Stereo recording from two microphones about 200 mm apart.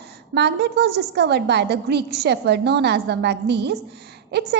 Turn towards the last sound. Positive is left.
turn(degrees=-55)  # may be behind; listen again after turning